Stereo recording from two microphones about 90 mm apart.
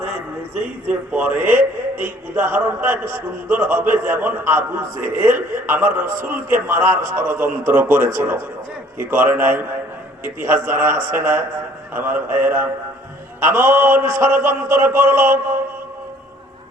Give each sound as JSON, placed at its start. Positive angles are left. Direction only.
{"t": 0.5, "sound": "a man's voice", "side_deg": -15}